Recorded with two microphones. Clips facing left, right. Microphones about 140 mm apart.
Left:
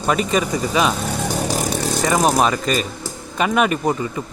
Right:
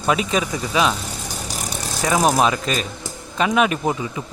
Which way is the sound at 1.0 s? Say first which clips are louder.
Left 9 dB; 60° left (ahead or behind).